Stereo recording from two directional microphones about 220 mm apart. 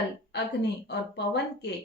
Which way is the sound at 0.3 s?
50° left (ahead or behind).